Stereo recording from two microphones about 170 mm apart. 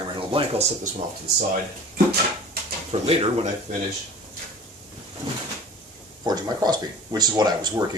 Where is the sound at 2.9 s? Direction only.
35° right (ahead or behind).